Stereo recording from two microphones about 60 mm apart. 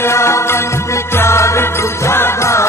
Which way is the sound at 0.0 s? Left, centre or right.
Left.